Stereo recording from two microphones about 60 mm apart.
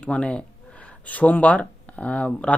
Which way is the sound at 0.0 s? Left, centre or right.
Centre.